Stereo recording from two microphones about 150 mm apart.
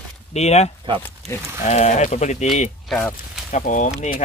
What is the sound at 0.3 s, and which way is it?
Speech, 45° left (ahead or behind).